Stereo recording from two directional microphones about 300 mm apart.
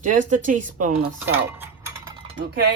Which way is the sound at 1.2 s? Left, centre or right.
Centre.